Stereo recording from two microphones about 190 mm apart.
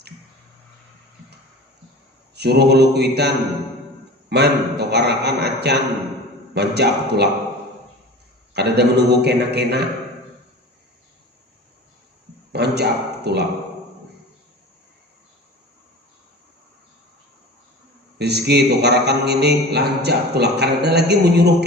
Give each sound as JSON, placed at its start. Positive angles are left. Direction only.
{"t": 2.3, "sound": "a man's voice", "side_deg": -60}
{"t": 8.5, "sound": "a man's voice", "side_deg": -60}
{"t": 12.5, "sound": "speech", "side_deg": -60}
{"t": 18.2, "sound": "a man's voice", "side_deg": -60}